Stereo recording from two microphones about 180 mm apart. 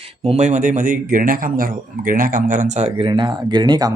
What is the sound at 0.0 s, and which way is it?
A man's voice, 35° right (ahead or behind).